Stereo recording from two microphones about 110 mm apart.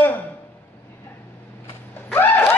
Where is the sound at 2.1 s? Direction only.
20° left (ahead or behind).